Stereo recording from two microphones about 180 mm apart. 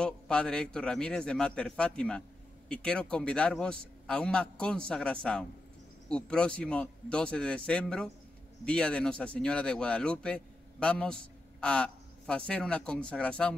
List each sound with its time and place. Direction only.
0.0 s a man's voice: 5° left (ahead or behind)